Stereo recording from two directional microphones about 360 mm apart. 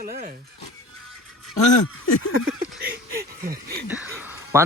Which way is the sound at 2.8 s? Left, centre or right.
Right.